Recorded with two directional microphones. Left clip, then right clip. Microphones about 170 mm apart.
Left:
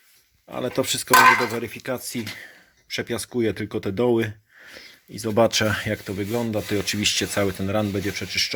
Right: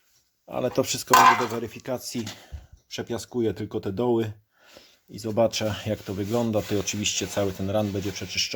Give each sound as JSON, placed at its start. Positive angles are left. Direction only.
{"t": 0.4, "sound": "speech", "side_deg": -15}
{"t": 1.5, "sound": "speech", "side_deg": 10}
{"t": 5.8, "sound": "speech", "side_deg": 0}
{"t": 6.1, "sound": "speech", "side_deg": -10}